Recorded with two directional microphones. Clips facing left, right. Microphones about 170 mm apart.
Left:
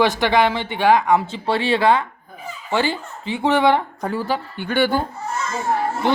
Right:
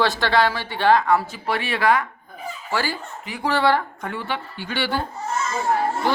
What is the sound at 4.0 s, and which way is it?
Speech, 35° left (ahead or behind).